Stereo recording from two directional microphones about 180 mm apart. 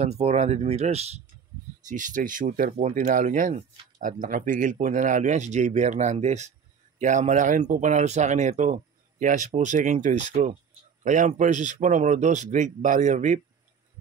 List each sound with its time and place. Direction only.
0.0 s speech: 35° right (ahead or behind)